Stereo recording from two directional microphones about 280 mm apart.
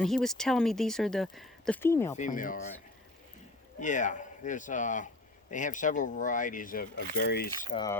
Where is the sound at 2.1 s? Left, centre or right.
Left.